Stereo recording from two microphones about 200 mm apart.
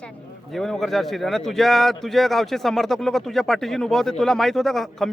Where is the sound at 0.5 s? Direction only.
Centre (ahead or behind).